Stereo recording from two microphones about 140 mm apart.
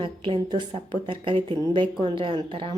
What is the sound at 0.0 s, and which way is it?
A woman's voice, 35° right (ahead or behind).